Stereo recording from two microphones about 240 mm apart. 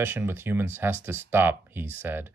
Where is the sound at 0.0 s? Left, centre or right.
Centre.